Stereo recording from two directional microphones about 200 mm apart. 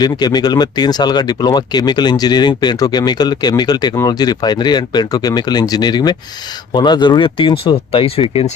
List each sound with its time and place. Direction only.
0.0 s speech: 20° left (ahead or behind)